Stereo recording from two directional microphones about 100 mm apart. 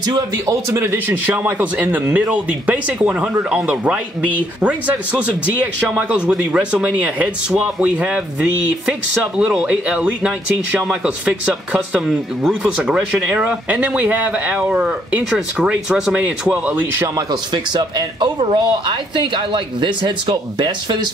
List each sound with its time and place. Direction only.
0.0 s a man's voice: 40° right (ahead or behind)
0.7 s speech: 25° right (ahead or behind)
17.3 s speech: 45° right (ahead or behind)